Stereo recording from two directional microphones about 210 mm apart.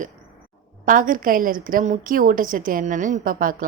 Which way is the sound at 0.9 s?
40° right (ahead or behind).